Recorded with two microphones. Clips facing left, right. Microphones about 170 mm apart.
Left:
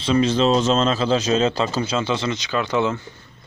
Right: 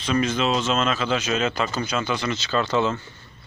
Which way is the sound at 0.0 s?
30° left (ahead or behind).